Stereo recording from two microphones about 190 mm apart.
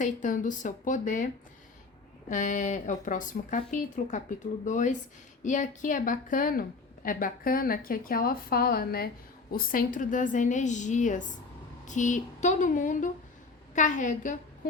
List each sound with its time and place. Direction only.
0.0 s speech: 40° left (ahead or behind)
2.3 s a woman's voice: 40° left (ahead or behind)